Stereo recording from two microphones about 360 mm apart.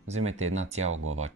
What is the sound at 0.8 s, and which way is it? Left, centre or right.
Speech, right.